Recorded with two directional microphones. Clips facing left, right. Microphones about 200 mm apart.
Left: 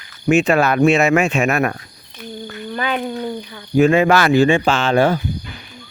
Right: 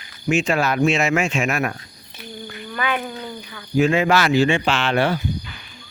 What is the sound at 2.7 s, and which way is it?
Speech, 30° left (ahead or behind).